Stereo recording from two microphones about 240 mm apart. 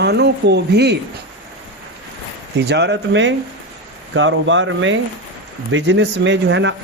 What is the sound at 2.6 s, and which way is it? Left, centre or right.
Speech, right.